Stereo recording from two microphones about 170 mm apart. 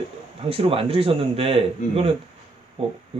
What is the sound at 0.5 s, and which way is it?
Speech, 35° right (ahead or behind).